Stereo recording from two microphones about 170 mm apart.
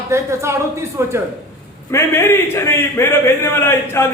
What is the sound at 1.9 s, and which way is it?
A man's voice, 15° left (ahead or behind).